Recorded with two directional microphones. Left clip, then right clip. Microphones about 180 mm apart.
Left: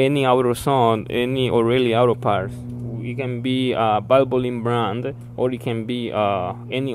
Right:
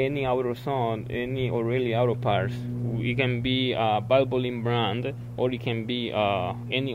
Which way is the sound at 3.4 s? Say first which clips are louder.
Left 5 dB; 35° left (ahead or behind).